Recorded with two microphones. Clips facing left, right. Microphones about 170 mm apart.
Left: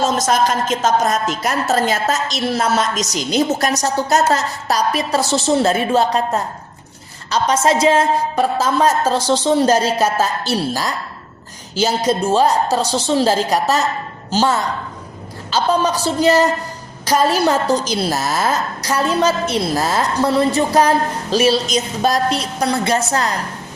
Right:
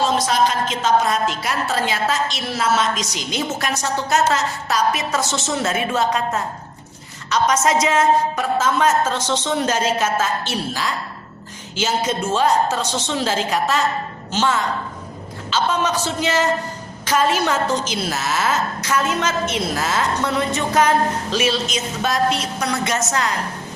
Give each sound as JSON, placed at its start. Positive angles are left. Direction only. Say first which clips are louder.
{"t": 0.0, "sound": "a woman's voice", "louder": "left 2 dB", "side_deg": 45}